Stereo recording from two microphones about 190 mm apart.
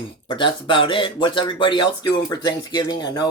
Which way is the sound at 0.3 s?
25° left (ahead or behind).